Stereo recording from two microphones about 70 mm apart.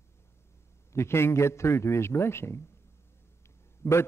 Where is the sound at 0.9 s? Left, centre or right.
Left.